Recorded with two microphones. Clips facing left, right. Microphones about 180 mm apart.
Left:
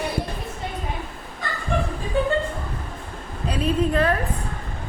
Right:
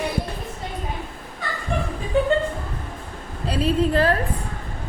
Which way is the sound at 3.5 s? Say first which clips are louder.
Right 2 dB; 30° right (ahead or behind).